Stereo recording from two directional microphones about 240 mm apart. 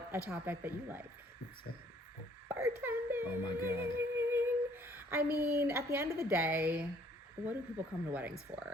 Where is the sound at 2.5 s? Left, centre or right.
Centre.